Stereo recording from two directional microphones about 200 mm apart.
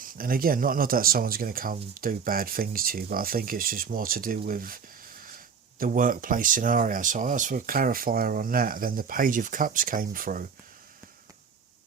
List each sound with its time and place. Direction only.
0.0 s speech: 45° right (ahead or behind)
5.8 s speech: 45° right (ahead or behind)